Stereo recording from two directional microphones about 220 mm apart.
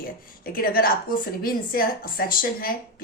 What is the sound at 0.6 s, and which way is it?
A woman's voice, 40° left (ahead or behind).